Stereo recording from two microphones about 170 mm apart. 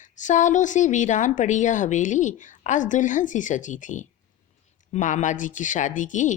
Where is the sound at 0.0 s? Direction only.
45° left (ahead or behind).